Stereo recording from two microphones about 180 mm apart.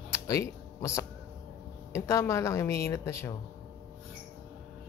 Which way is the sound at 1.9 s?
15° left (ahead or behind).